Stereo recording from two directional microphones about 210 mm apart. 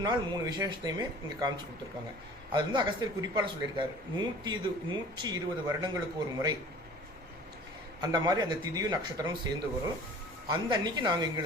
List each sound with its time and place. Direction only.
0.0 s a man's voice: 20° right (ahead or behind)
8.0 s a man's voice: 20° right (ahead or behind)
10.5 s a man's voice: 20° right (ahead or behind)